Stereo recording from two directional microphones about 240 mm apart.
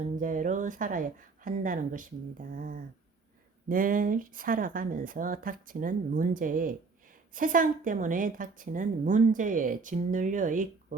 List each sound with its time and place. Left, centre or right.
0.0 s a woman's voice: right